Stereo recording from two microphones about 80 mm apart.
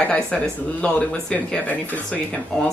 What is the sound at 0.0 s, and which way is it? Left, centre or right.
Speech, centre.